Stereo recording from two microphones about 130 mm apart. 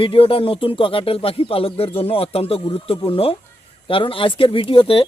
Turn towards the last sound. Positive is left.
turn(degrees=45)  # may be behind; listen again after turning